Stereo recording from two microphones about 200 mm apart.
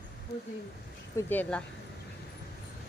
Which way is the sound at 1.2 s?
10° left (ahead or behind).